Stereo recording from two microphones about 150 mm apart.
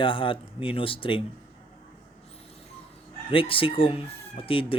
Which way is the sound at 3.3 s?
35° left (ahead or behind).